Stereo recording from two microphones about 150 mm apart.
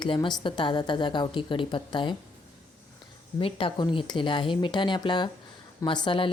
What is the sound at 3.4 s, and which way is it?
Speech, 35° left (ahead or behind).